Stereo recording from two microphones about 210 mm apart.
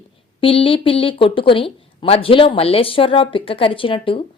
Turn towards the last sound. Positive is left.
turn(degrees=25)  # may be behind; listen again after turning